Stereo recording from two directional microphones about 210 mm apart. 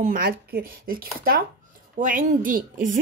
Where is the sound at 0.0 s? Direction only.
45° right (ahead or behind).